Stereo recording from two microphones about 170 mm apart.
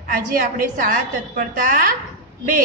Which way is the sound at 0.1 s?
50° right (ahead or behind).